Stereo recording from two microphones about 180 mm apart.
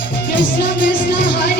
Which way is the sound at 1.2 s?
60° left (ahead or behind).